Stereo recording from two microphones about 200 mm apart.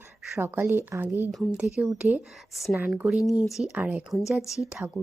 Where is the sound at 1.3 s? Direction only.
Centre (ahead or behind).